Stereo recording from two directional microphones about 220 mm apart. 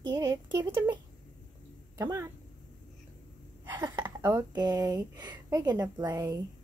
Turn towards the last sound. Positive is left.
turn(degrees=-15)  # may be behind; listen again after turning